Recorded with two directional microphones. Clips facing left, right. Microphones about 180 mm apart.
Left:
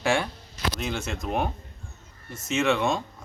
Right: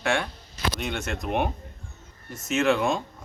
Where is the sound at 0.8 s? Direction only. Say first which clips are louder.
Even; centre (ahead or behind).